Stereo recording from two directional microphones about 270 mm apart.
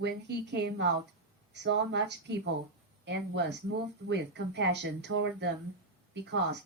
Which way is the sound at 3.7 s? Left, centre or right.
Right.